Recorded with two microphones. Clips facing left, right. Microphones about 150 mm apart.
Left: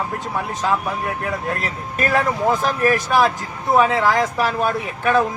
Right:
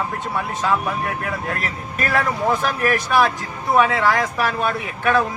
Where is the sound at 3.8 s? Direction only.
15° left (ahead or behind).